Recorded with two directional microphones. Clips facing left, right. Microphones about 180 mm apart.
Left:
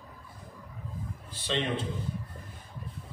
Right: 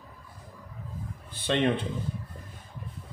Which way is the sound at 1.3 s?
55° right (ahead or behind).